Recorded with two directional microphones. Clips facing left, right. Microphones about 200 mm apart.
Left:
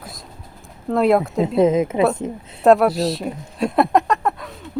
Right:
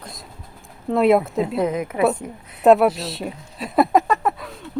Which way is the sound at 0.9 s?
Centre (ahead or behind).